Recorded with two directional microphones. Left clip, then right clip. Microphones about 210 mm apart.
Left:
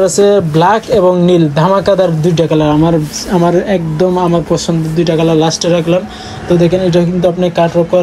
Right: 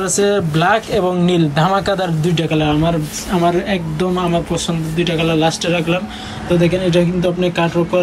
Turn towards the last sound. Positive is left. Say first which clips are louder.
# left 6 dB
turn(degrees=15)  # may be behind; listen again after turning